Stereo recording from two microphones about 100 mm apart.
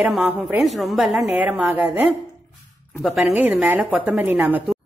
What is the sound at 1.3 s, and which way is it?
Speech, 15° right (ahead or behind).